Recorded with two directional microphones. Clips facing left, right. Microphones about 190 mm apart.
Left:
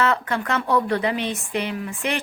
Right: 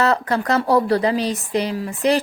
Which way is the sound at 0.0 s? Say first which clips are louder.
Right 3 dB; 35° right (ahead or behind).